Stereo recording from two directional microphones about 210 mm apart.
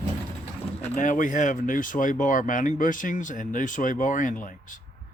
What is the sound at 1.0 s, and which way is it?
Speech, 40° left (ahead or behind).